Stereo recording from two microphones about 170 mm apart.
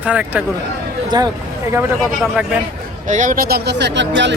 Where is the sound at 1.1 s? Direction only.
25° right (ahead or behind).